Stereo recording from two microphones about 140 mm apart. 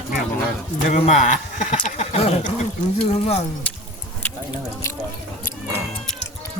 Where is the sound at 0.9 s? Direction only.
55° left (ahead or behind).